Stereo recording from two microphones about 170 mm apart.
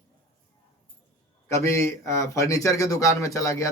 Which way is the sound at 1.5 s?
15° left (ahead or behind).